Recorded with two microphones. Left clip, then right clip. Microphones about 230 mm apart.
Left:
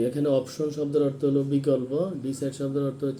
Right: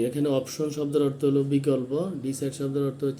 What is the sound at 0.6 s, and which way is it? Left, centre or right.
Speech, centre.